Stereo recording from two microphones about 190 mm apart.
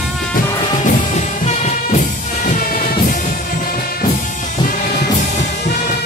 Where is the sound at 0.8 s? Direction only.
40° left (ahead or behind).